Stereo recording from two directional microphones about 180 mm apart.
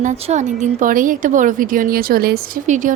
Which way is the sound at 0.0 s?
40° right (ahead or behind).